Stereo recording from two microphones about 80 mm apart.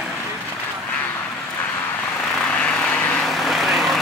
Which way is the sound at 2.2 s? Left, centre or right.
Centre.